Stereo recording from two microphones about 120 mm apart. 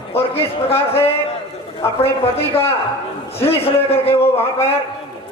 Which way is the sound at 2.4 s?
55° left (ahead or behind).